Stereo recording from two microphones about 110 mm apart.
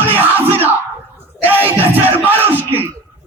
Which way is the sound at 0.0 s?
15° right (ahead or behind).